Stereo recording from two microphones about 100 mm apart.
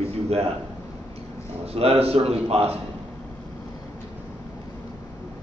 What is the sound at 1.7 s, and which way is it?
A man's voice, 80° right.